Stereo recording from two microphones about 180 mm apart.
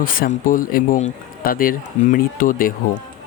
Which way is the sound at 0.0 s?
50° left (ahead or behind).